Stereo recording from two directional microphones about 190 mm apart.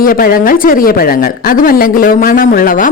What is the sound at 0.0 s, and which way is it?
A woman's voice, 50° left (ahead or behind).